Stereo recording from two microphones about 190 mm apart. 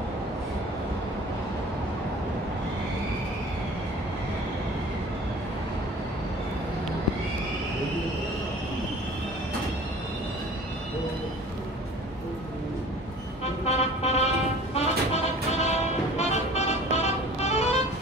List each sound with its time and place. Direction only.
13.7 s music: 35° left (ahead or behind)